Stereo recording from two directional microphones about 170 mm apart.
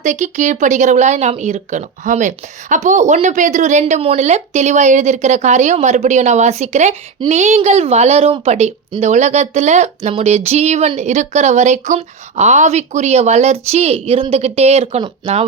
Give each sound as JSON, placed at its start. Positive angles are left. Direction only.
{"t": 0.0, "sound": "a woman's voice", "side_deg": -45}